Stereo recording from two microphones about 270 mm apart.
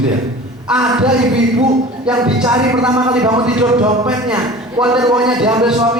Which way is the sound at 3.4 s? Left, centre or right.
Centre.